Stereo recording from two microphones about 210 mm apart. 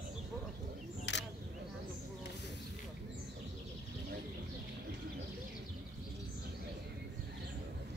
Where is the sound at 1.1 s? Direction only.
55° left (ahead or behind).